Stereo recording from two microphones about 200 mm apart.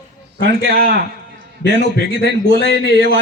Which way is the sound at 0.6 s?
50° right (ahead or behind).